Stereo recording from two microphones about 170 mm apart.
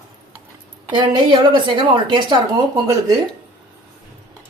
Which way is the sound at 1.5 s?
30° right (ahead or behind).